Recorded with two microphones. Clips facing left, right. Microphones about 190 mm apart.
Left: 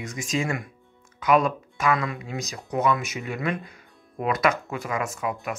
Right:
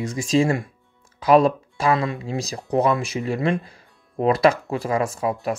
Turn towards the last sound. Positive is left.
turn(degrees=-30)  # may be behind; listen again after turning